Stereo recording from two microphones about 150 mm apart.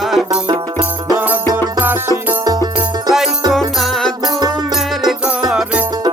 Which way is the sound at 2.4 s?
25° right (ahead or behind).